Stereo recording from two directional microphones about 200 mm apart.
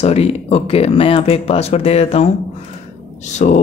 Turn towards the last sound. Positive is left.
turn(degrees=40)  # may be behind; listen again after turning